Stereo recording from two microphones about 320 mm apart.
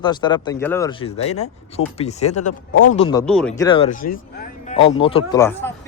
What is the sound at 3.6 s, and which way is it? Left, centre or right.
Speech, centre.